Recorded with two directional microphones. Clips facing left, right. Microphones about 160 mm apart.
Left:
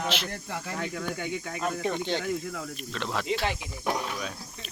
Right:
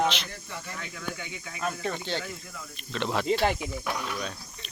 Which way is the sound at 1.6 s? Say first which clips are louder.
Left 1 dB; 15° left (ahead or behind).